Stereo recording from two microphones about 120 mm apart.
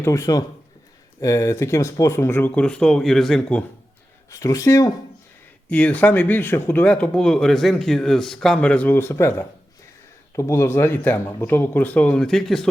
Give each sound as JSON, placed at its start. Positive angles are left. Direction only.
{"t": 0.0, "sound": "speech", "side_deg": 25}
{"t": 4.3, "sound": "speech", "side_deg": 25}
{"t": 5.7, "sound": "speech", "side_deg": 15}